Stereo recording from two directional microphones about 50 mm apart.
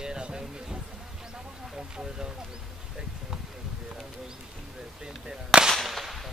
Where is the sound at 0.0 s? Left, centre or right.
Centre.